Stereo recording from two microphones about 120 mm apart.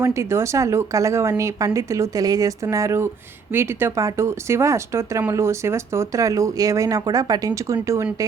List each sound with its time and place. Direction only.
0.0 s speech: 25° right (ahead or behind)